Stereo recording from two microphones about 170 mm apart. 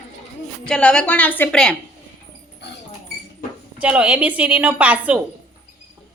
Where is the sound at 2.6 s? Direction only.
80° left.